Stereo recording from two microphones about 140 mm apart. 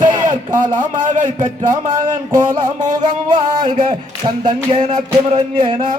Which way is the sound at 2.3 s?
70° right (ahead or behind).